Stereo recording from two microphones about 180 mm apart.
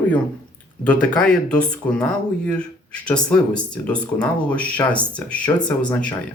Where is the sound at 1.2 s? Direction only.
5° left (ahead or behind).